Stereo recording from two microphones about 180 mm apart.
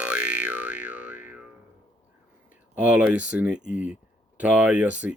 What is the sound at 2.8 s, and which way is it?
Speech, 10° right (ahead or behind).